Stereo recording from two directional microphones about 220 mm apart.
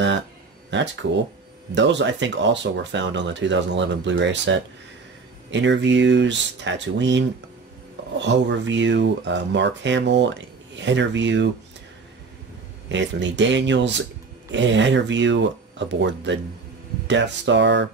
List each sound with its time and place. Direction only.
0.7 s speech: 55° right (ahead or behind)
12.8 s speech: 55° right (ahead or behind)